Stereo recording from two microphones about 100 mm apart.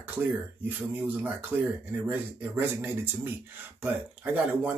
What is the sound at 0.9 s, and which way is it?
Speech, 15° right (ahead or behind).